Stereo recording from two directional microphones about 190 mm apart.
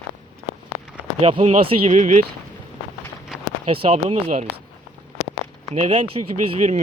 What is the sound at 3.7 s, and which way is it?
Speech, 30° right (ahead or behind).